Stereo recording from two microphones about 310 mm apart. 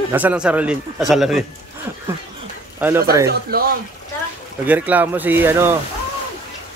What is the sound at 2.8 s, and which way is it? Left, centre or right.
Speech, centre.